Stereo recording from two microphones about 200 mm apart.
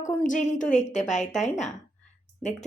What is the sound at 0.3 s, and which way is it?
A woman's voice, 40° left (ahead or behind).